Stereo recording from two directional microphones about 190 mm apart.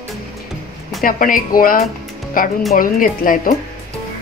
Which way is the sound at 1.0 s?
45° left (ahead or behind).